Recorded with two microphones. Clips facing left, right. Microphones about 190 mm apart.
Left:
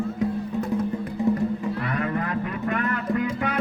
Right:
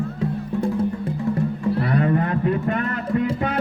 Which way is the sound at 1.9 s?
30° right (ahead or behind).